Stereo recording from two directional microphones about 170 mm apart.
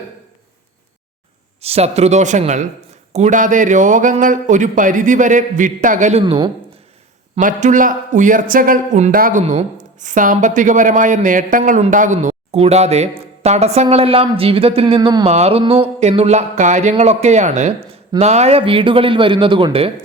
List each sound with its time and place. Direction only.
1.6 s a man's voice: 35° right (ahead or behind)
7.3 s speech: 50° right (ahead or behind)
9.1 s speech: 55° right (ahead or behind)
9.4 s a man's voice: 45° right (ahead or behind)